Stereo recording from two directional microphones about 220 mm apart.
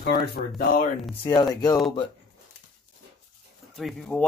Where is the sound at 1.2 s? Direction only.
20° left (ahead or behind).